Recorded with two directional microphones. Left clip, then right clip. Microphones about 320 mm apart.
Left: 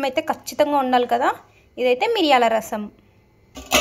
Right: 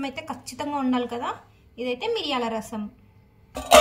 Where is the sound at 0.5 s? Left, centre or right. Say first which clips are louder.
Left 9 dB; left.